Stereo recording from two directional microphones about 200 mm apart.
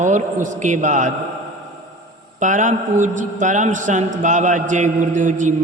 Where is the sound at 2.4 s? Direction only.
40° right (ahead or behind).